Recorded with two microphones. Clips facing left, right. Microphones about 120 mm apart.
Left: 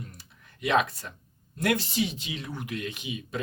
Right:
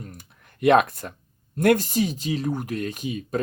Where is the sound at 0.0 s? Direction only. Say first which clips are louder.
Right 4 dB; 55° right (ahead or behind).